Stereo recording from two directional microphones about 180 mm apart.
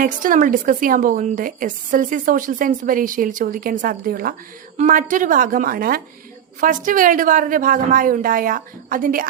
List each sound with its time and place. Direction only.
0.0 s a woman's voice: 50° right (ahead or behind)